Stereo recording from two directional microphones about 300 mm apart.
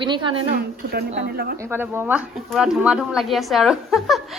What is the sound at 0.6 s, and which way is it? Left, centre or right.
Speech, right.